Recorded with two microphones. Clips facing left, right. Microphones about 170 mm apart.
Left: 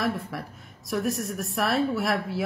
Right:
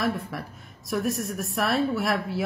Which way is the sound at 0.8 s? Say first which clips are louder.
Even; centre (ahead or behind).